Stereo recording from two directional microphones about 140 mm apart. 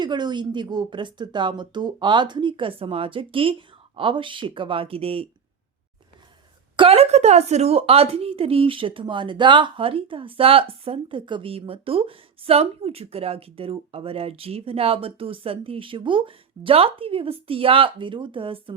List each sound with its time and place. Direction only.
0.0 s a woman's voice: 30° right (ahead or behind)
6.7 s a woman's voice: 45° right (ahead or behind)